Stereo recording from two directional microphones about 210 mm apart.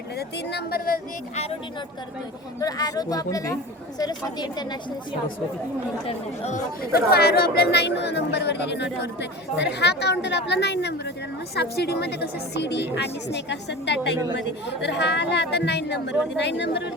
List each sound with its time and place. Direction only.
0.2 s speech: 50° left (ahead or behind)
2.6 s a woman's voice: 15° left (ahead or behind)
6.1 s speech: 30° left (ahead or behind)
6.9 s a woman's voice: 50° left (ahead or behind)